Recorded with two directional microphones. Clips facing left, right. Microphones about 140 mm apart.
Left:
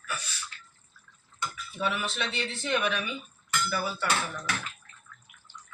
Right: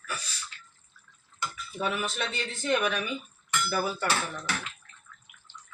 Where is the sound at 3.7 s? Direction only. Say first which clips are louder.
Right 4 dB; 45° right (ahead or behind).